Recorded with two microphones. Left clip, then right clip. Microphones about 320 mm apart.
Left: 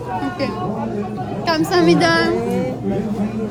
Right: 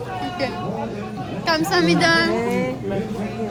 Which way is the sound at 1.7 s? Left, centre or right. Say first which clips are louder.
Left 3 dB; centre.